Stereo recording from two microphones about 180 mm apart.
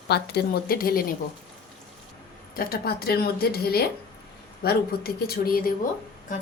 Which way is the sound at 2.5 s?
55° left (ahead or behind).